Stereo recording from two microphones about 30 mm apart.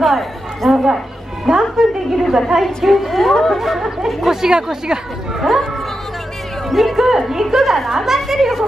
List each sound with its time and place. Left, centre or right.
0.0 s chatter: centre
1.4 s a woman's voice: centre
2.2 s a woman's voice: centre; by 5.0 s right
5.4 s music: centre
6.7 s a woman's voice: centre